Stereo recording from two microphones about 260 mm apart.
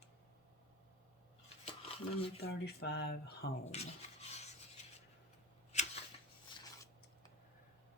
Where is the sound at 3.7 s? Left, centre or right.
Left.